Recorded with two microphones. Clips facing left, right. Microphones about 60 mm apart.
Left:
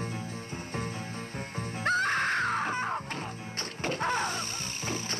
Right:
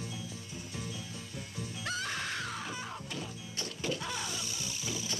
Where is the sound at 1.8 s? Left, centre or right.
Left.